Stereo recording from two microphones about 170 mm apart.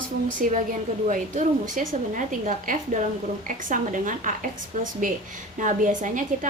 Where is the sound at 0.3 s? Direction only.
50° right (ahead or behind).